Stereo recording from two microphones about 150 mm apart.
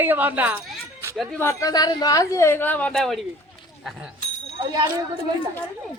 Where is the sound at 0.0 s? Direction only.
15° right (ahead or behind).